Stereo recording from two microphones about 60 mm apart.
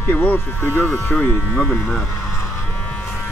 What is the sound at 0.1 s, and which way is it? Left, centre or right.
Speech, left.